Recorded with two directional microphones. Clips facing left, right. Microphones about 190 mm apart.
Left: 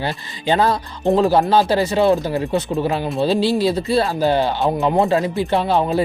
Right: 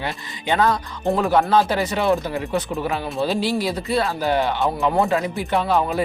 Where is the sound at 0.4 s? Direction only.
30° left (ahead or behind).